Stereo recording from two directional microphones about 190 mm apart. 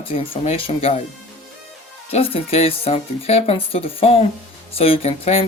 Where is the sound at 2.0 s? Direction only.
30° left (ahead or behind).